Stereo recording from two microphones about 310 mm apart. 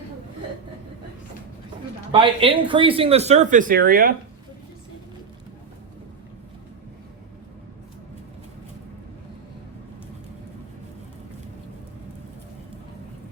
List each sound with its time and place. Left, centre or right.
2.1 s speech: centre